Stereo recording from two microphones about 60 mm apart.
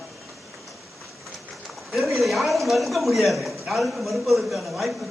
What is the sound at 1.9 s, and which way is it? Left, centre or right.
A man's voice, centre.